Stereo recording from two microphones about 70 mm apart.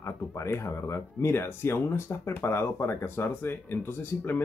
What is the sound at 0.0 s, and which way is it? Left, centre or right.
Speech, left.